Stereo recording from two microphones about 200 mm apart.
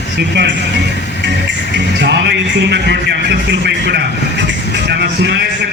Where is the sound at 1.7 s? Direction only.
60° right (ahead or behind).